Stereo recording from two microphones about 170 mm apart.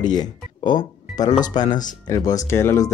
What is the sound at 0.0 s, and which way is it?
Music, 25° left (ahead or behind).